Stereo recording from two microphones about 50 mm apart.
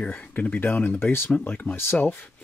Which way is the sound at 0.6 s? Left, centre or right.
Left.